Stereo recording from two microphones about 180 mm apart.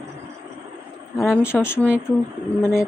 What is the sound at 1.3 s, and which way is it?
Speech, 15° left (ahead or behind).